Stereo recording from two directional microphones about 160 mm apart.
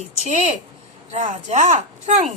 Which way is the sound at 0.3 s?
45° right (ahead or behind).